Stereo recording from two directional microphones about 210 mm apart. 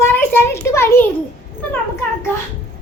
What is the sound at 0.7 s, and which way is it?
Speech, 10° left (ahead or behind).